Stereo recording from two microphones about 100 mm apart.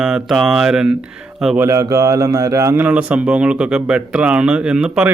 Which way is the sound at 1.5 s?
30° right (ahead or behind).